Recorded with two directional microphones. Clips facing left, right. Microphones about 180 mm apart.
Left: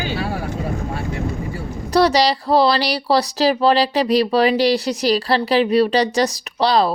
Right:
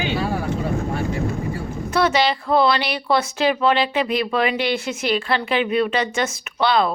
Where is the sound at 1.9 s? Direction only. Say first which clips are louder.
Left 4 dB; 35° left (ahead or behind).